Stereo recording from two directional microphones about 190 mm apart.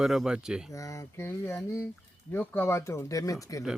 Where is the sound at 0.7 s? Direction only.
15° left (ahead or behind).